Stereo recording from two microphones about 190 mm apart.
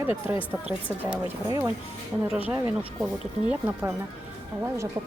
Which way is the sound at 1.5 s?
15° right (ahead or behind).